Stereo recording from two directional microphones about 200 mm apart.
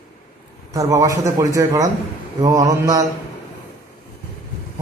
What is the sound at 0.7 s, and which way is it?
A man's voice, 15° right (ahead or behind).